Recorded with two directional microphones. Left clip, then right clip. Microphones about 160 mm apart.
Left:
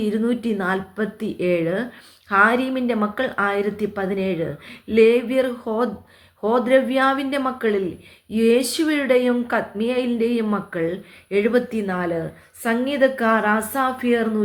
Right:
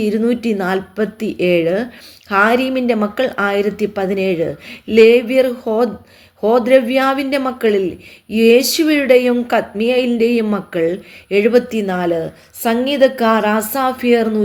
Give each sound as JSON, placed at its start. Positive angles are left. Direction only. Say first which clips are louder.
{"t": 0.0, "sound": "a woman's voice", "louder": "right 6 dB", "side_deg": -40}